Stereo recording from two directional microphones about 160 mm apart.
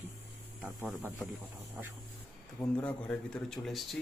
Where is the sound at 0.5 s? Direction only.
5° right (ahead or behind).